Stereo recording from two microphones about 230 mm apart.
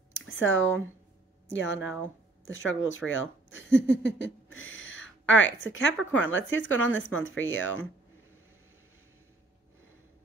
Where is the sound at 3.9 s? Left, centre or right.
Left.